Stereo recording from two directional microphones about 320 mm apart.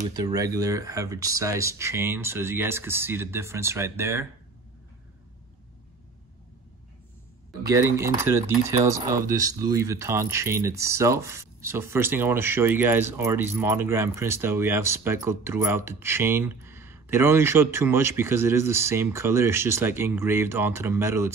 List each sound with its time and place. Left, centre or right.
0.0 s speech: centre
7.6 s speech: centre